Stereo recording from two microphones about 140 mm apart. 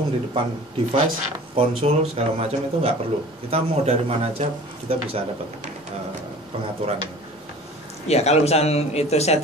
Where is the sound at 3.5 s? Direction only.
50° right (ahead or behind).